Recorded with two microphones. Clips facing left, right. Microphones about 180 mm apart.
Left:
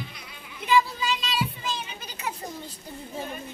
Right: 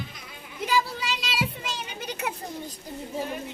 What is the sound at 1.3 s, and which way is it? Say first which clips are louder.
Children playing: left 1 dB; 75° right (ahead or behind).